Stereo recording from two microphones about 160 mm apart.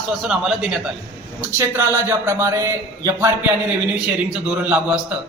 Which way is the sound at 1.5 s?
15° right (ahead or behind).